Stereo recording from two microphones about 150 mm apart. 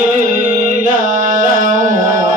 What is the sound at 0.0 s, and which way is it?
Music, 60° right (ahead or behind).